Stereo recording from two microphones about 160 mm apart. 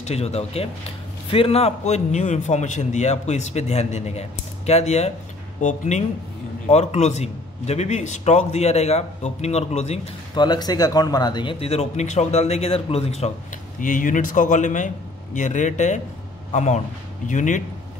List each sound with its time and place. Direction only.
0.0 s a man's voice: 40° left (ahead or behind)
10.3 s a man's voice: 25° left (ahead or behind)
13.7 s a man's voice: 55° left (ahead or behind)